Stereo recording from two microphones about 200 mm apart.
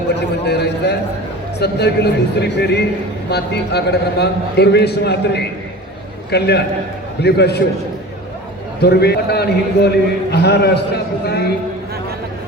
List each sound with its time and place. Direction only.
0.2 s a sound: 55° left (ahead or behind)
1.5 s a man's voice: 55° left (ahead or behind)
8.8 s a man's voice: 55° left (ahead or behind)